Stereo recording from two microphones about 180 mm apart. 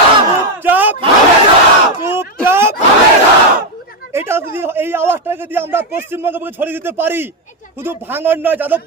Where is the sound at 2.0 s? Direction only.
15° right (ahead or behind).